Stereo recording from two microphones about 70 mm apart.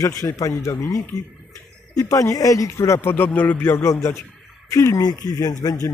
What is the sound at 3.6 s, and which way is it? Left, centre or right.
A man's voice, left.